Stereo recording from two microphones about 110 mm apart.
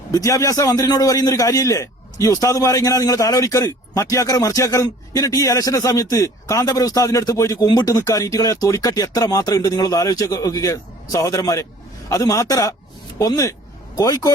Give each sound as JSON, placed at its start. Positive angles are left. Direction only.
{"t": 0.1, "sound": "a man's voice", "side_deg": 30}